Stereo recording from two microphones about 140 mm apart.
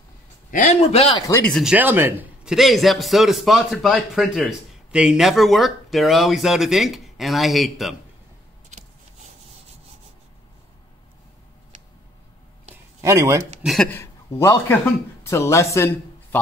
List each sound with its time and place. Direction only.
0.5 s a man's voice: 65° left (ahead or behind)
1.5 s speech: 5° right (ahead or behind)
2.5 s a man's voice: centre (ahead or behind)
13.0 s speech: 20° right (ahead or behind)
13.6 s speech: centre (ahead or behind)
13.8 s speech: 15° left (ahead or behind)